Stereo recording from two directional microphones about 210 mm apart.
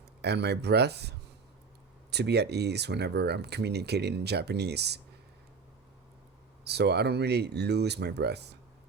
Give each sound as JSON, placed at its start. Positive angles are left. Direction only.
{"t": 0.2, "sound": "speech", "side_deg": -50}
{"t": 6.7, "sound": "speech", "side_deg": -50}